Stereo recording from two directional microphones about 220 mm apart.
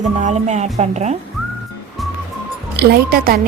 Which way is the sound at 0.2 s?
30° right (ahead or behind).